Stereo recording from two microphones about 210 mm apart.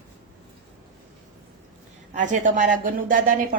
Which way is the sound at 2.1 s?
35° right (ahead or behind).